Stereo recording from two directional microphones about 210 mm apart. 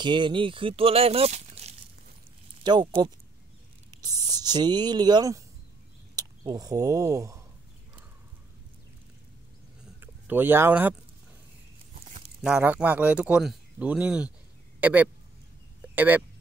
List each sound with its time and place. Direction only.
0.0 s speech: 20° right (ahead or behind)
9.9 s speech: 10° right (ahead or behind)
12.4 s a man's voice: 5° right (ahead or behind)